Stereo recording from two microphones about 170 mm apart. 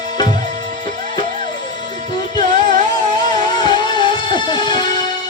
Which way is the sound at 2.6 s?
25° left (ahead or behind).